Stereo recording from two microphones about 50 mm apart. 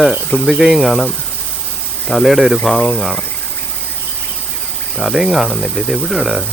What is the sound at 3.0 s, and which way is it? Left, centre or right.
Speech, centre.